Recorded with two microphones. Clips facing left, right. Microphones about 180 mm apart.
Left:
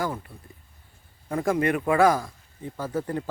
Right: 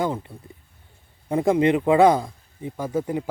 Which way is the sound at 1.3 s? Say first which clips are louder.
Right 5 dB; 20° right (ahead or behind).